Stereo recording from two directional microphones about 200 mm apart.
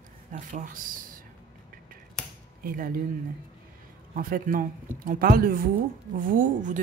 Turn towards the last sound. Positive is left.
turn(degrees=-40)  # may be behind; listen again after turning